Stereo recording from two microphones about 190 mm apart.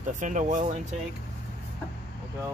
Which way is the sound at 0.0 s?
40° right (ahead or behind).